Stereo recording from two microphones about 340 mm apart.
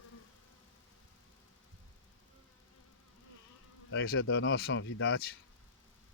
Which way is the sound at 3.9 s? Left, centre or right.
Left.